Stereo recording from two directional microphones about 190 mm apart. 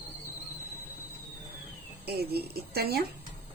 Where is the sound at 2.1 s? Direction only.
55° right (ahead or behind).